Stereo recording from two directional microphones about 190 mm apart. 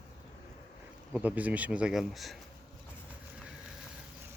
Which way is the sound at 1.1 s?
10° right (ahead or behind).